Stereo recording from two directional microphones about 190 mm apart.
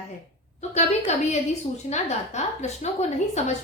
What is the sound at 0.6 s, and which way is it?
Speech, 35° left (ahead or behind).